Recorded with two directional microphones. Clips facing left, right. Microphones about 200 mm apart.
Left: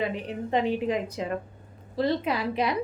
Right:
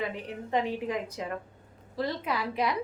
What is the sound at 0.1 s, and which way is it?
A woman's voice, 25° left (ahead or behind).